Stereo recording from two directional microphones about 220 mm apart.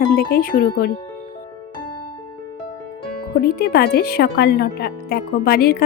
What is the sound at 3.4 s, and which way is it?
Speech, 45° left (ahead or behind).